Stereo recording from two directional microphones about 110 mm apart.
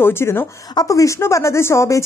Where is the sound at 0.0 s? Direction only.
25° left (ahead or behind).